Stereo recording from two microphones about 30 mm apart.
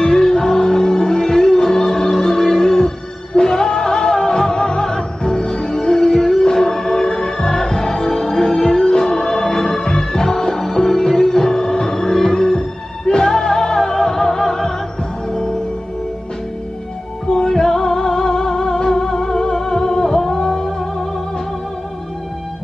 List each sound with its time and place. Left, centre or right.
0.1 s music: centre
13.0 s music: left
17.3 s music: centre